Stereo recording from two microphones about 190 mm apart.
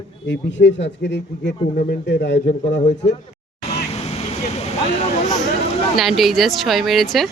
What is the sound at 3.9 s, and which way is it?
Vehicle, 35° left (ahead or behind).